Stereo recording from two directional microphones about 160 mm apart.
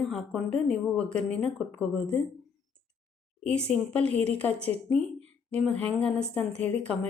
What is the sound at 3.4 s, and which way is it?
A woman's voice, 5° left (ahead or behind).